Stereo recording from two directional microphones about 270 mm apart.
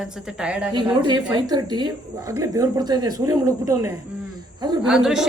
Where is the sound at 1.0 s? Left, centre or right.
Centre.